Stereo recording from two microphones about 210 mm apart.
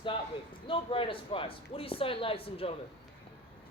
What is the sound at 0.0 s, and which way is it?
A man's voice, 25° left (ahead or behind).